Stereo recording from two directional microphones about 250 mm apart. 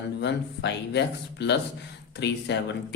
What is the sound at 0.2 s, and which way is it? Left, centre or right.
Speech, left.